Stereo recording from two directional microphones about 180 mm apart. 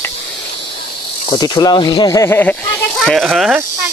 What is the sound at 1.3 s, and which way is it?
Speech, 25° left (ahead or behind).